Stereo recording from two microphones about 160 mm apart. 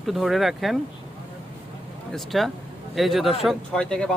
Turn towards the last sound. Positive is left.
turn(degrees=5)  # may be behind; listen again after turning